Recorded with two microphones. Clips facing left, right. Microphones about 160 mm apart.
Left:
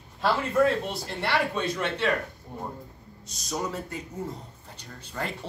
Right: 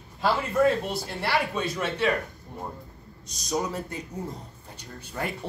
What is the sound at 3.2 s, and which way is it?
A man's voice, 15° right (ahead or behind).